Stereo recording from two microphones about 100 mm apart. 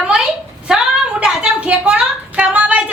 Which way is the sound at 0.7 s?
5° right (ahead or behind).